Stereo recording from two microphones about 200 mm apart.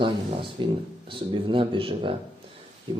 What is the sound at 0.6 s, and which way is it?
Speech, 25° right (ahead or behind).